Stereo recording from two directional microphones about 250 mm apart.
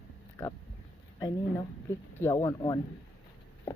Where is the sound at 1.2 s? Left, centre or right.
Centre.